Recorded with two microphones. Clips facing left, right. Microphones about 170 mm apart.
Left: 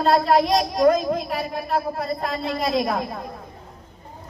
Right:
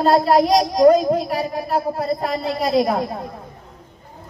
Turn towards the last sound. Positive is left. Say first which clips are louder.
# right 5 dB
turn(degrees=-30)  # may be behind; listen again after turning